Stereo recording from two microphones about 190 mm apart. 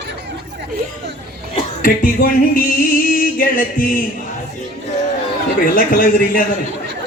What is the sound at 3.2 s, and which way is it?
Music, 50° left (ahead or behind).